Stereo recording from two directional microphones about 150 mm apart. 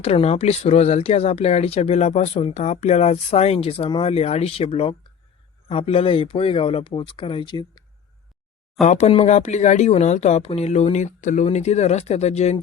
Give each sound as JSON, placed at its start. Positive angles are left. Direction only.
{"t": 0.0, "sound": "speech", "side_deg": 45}
{"t": 8.8, "sound": "speech", "side_deg": 50}